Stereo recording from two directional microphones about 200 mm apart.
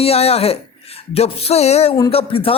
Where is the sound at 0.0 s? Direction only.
30° left (ahead or behind).